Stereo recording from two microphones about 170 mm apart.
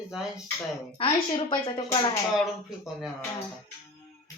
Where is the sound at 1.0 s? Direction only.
30° left (ahead or behind).